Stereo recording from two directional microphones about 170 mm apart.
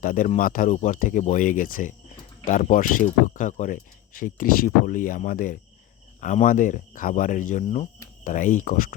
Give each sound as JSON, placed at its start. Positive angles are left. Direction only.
{"t": 0.0, "sound": "speech", "side_deg": 55}